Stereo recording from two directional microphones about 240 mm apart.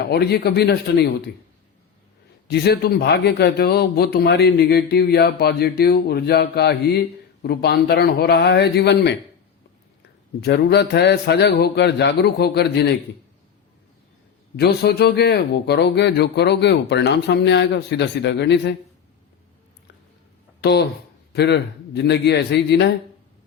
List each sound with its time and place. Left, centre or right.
0.0 s a man's voice: left
2.5 s a man's voice: left
10.4 s a man's voice: left
14.5 s a man's voice: left
20.6 s a man's voice: left